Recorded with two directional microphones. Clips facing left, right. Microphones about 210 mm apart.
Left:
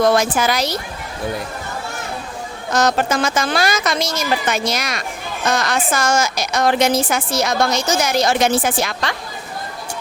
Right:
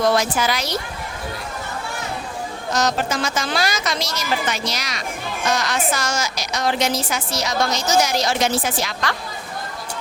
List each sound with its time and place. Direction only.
0.1 s a woman's voice: 50° left (ahead or behind)
2.7 s a woman's voice: 55° left (ahead or behind)